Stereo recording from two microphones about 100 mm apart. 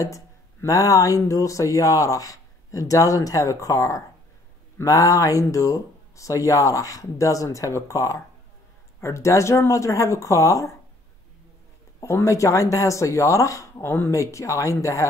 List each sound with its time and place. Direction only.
0.0 s speech: 35° left (ahead or behind)
12.0 s speech: 30° left (ahead or behind)